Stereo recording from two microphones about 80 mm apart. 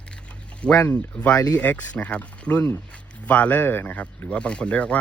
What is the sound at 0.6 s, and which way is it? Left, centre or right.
Speech, centre.